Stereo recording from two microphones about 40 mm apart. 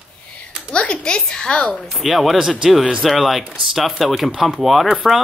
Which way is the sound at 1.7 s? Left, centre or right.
Centre.